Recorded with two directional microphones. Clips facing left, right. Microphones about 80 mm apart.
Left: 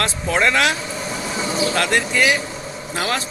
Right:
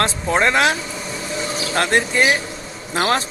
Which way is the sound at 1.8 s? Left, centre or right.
Right.